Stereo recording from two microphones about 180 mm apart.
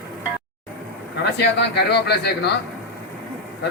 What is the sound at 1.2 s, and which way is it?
A man's voice, 70° left (ahead or behind).